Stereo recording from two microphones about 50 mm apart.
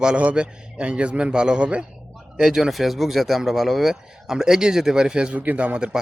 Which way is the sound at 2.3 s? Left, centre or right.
Centre.